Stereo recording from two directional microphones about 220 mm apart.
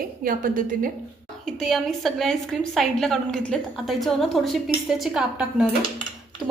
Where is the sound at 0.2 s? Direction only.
40° right (ahead or behind).